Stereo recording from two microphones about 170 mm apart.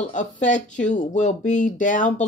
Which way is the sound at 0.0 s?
45° left (ahead or behind).